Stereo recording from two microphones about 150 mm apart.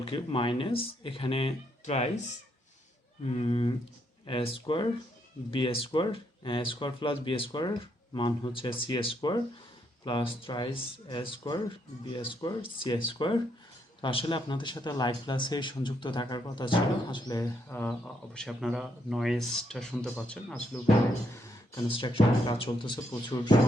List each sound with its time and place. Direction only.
0.0 s speech: 35° left (ahead or behind)
1.8 s speech: 50° left (ahead or behind)
3.2 s speech: 40° left (ahead or behind)
17.7 s speech: 10° left (ahead or behind)
21.8 s speech: 35° left (ahead or behind)